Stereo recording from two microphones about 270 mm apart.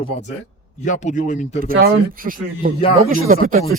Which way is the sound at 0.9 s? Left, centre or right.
Left.